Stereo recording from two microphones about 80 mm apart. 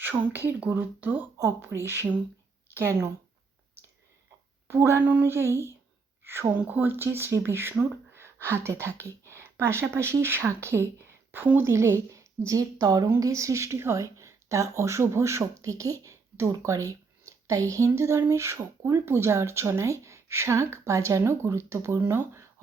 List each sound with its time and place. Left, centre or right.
0.0 s speech: right
1.4 s a woman's voice: right
4.7 s a woman's voice: right